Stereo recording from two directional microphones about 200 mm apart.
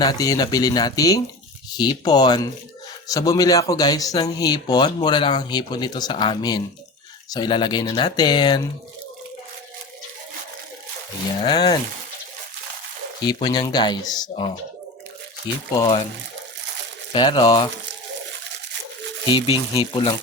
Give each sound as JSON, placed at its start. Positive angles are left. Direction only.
{"t": 0.0, "sound": "speech", "side_deg": 20}
{"t": 11.4, "sound": "speech", "side_deg": 20}
{"t": 13.2, "sound": "speech", "side_deg": 20}
{"t": 15.7, "sound": "speech", "side_deg": 20}
{"t": 17.1, "sound": "speech", "side_deg": 20}
{"t": 19.3, "sound": "speech", "side_deg": 25}